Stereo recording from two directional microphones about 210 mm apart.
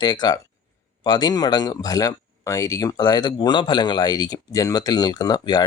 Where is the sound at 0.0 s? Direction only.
20° left (ahead or behind).